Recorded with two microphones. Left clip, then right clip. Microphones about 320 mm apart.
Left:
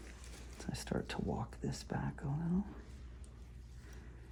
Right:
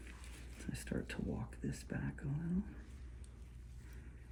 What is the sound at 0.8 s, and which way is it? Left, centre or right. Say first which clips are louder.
Speech: left 4 dB; left.